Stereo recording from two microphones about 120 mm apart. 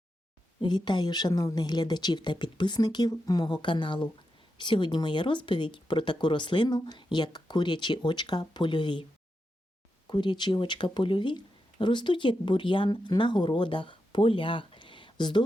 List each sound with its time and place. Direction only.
0.6 s speech: 40° left (ahead or behind)
10.1 s speech: 40° left (ahead or behind)